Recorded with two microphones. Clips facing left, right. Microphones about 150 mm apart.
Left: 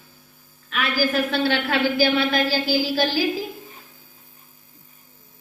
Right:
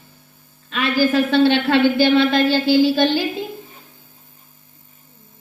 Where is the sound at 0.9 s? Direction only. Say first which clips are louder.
Right 6 dB; 25° right (ahead or behind).